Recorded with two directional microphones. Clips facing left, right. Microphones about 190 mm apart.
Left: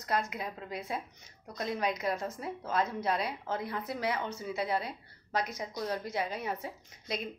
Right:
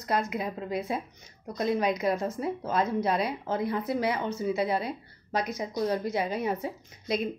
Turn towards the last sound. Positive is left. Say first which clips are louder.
# right 8 dB
turn(degrees=-20)  # may be behind; listen again after turning